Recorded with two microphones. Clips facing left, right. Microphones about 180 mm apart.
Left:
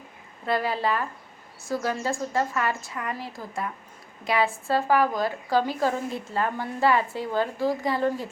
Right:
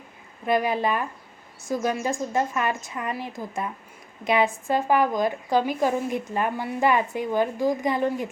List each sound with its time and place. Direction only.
0.4 s a woman's voice: 15° right (ahead or behind)